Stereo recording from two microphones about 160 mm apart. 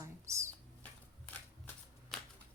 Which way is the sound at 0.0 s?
20° right (ahead or behind).